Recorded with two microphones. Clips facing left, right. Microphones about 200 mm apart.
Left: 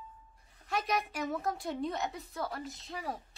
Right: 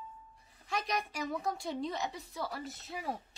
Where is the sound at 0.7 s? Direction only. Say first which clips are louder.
Left 2 dB; centre (ahead or behind).